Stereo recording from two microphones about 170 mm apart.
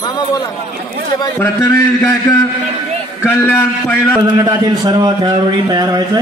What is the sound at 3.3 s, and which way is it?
Speech, 10° left (ahead or behind).